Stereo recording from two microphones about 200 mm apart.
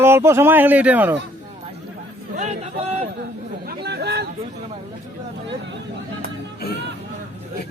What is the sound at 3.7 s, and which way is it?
Chatter, 55° right (ahead or behind).